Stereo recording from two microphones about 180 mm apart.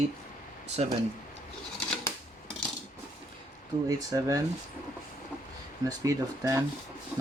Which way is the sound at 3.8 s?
20° right (ahead or behind).